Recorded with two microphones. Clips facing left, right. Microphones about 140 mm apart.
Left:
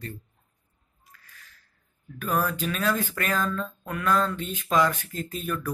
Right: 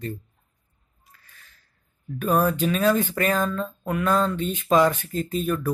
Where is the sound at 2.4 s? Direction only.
20° right (ahead or behind).